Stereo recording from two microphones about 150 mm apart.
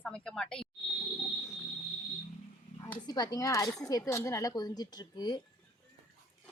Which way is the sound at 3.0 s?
25° left (ahead or behind).